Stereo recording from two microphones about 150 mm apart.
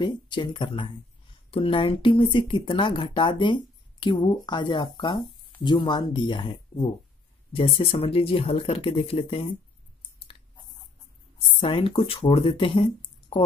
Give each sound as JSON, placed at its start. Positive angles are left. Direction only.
{"t": 0.0, "sound": "speech", "side_deg": 30}
{"t": 11.6, "sound": "speech", "side_deg": 35}